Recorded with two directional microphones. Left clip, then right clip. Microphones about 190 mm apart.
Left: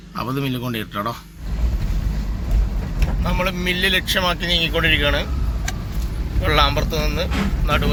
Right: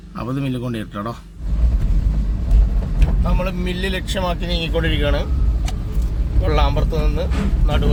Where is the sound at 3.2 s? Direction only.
10° right (ahead or behind).